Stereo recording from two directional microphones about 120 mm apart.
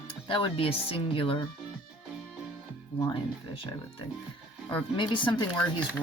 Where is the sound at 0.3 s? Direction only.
45° left (ahead or behind).